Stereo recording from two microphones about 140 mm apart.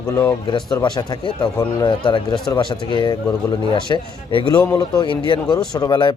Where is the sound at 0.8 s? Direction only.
35° left (ahead or behind).